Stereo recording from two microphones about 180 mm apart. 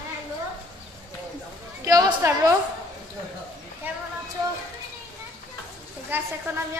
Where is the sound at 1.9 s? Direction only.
20° right (ahead or behind).